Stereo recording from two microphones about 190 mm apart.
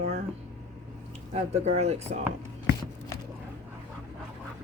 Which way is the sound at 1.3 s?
35° right (ahead or behind).